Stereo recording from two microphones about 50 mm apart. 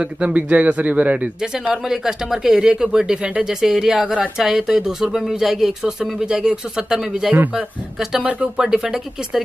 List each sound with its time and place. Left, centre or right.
0.0 s a man's voice: right
1.7 s speech: centre
8.2 s a man's voice: right
8.5 s speech: centre